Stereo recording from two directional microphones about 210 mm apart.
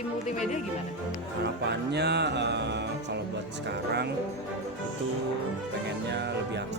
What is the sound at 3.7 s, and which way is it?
Speech, 55° right (ahead or behind).